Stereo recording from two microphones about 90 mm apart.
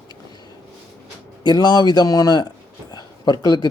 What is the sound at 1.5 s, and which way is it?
A man's voice, 50° left (ahead or behind).